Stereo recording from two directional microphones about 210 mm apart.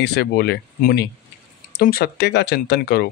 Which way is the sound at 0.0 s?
50° left (ahead or behind).